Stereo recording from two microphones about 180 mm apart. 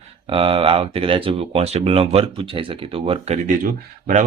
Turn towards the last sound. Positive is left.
turn(degrees=-50)  # may be behind; listen again after turning